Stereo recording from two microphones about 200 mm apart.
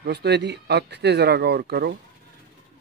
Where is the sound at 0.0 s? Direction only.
55° right (ahead or behind).